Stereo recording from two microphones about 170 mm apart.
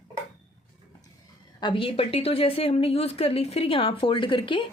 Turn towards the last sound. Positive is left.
turn(degrees=30)  # may be behind; listen again after turning